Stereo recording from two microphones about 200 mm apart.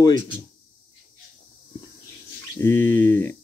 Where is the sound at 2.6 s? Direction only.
10° left (ahead or behind).